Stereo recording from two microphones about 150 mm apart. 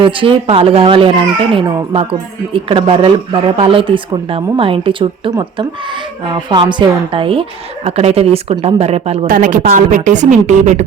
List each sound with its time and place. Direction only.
0.0 s speech: 35° right (ahead or behind)
9.2 s a woman's voice: 65° right (ahead or behind)